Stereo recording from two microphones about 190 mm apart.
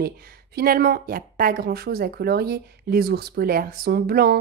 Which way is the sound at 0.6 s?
50° right (ahead or behind).